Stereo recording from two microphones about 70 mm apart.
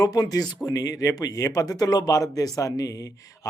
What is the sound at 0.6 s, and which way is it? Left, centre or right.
Speech, left.